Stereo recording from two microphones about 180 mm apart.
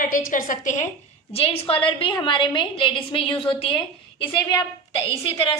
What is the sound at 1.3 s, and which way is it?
A woman's voice, 35° left (ahead or behind).